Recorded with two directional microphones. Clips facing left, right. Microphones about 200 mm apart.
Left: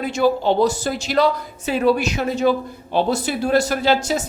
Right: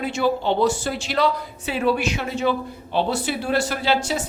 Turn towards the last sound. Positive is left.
turn(degrees=40)  # may be behind; listen again after turning